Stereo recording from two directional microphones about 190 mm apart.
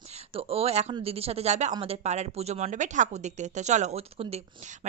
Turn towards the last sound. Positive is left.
turn(degrees=-35)  # may be behind; listen again after turning